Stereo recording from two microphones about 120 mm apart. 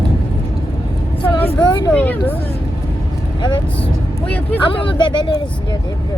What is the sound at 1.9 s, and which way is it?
Speech, 10° left (ahead or behind).